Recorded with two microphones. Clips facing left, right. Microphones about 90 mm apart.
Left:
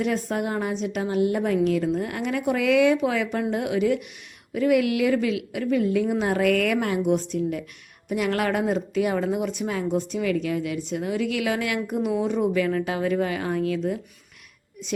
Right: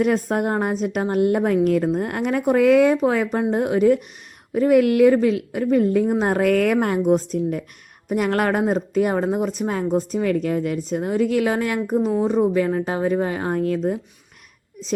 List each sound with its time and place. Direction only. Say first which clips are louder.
0.0 s a woman's voice: right 5 dB; 45° right (ahead or behind)